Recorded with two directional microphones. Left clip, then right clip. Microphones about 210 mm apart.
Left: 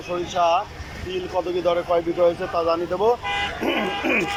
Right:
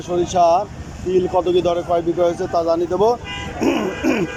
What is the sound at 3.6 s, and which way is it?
Music, 10° right (ahead or behind).